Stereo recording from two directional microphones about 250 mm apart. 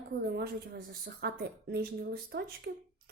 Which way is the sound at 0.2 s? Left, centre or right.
Right.